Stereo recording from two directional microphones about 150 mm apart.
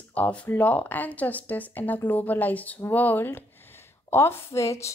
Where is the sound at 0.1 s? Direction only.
10° left (ahead or behind).